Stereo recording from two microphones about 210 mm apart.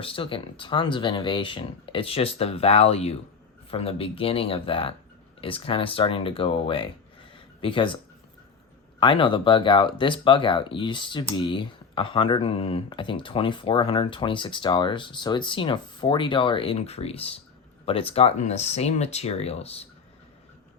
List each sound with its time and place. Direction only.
0.0 s speech: 25° left (ahead or behind)
9.0 s speech: 25° left (ahead or behind)